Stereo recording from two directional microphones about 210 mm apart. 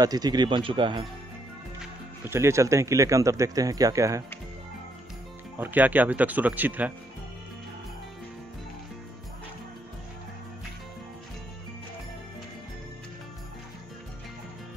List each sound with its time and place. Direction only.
0.0 s speech: 20° right (ahead or behind)
1.8 s speech: 10° right (ahead or behind)
5.6 s speech: 10° right (ahead or behind)